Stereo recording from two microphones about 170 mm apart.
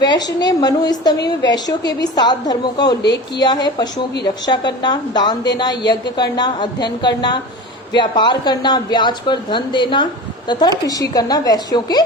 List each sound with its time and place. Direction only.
0.0 s speech: 25° left (ahead or behind)